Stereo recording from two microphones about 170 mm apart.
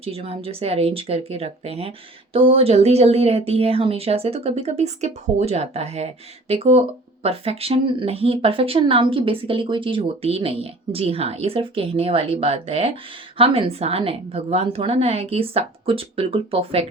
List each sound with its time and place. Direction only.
0.0 s speech: 35° right (ahead or behind)